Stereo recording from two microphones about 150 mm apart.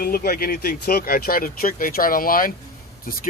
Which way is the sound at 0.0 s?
90° left.